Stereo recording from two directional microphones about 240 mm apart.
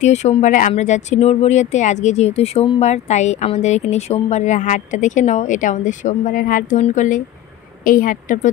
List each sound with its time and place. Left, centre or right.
0.0 s a woman's voice: left